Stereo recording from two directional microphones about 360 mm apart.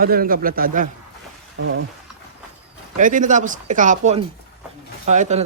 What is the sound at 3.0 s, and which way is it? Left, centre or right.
Speech, right.